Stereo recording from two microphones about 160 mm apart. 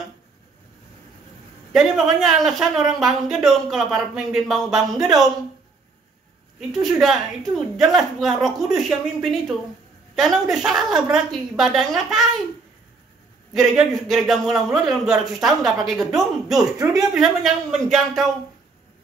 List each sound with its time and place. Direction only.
1.7 s speech: centre (ahead or behind)
6.7 s speech: centre (ahead or behind)
13.5 s speech: centre (ahead or behind)
16.5 s speech: 20° right (ahead or behind)
17.1 s speech: centre (ahead or behind)